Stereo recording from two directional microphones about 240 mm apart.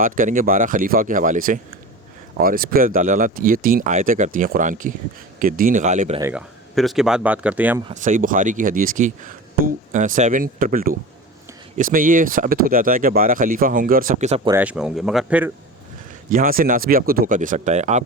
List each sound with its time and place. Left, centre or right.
0.0 s speech: right
6.1 s speech: centre
7.9 s speech: right
14.5 s speech: centre
16.3 s speech: right